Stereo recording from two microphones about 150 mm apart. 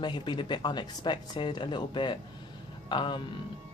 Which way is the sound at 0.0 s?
30° left (ahead or behind).